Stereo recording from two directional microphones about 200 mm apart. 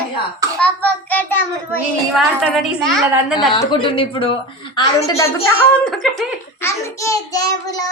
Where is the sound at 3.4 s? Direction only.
20° left (ahead or behind); by 6.3 s centre (ahead or behind).